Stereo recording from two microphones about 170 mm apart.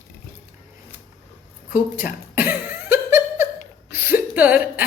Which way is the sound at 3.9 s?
10° right (ahead or behind).